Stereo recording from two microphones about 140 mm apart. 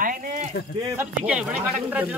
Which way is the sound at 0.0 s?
70° right (ahead or behind).